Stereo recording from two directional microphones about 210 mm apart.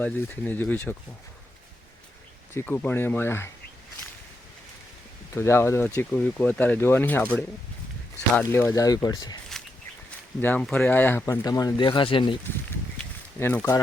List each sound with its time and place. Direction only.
0.0 s speech: 10° left (ahead or behind)
2.5 s speech: 10° left (ahead or behind)
5.3 s speech: 10° left (ahead or behind)
10.4 s speech: 5° left (ahead or behind); by 12.4 s 25° left (ahead or behind)
13.0 s a sound: 10° left (ahead or behind)